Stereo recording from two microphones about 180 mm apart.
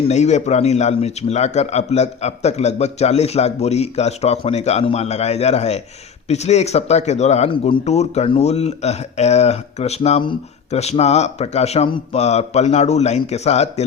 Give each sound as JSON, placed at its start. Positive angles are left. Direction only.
{"t": 0.1, "sound": "speech", "side_deg": 40}